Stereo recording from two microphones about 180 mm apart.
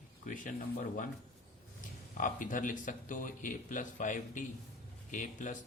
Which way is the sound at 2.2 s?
45° left (ahead or behind).